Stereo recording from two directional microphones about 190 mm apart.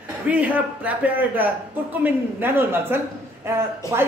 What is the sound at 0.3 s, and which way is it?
A woman's voice, 5° right (ahead or behind).